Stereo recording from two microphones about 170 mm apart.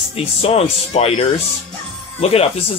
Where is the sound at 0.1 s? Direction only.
35° left (ahead or behind).